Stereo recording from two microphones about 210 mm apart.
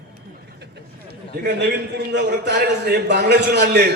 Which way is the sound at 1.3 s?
50° right (ahead or behind).